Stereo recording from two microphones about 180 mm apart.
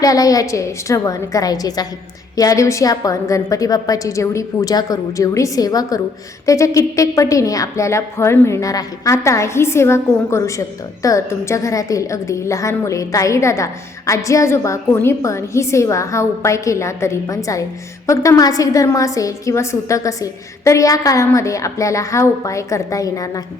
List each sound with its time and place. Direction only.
0.0 s a woman's voice: 20° left (ahead or behind)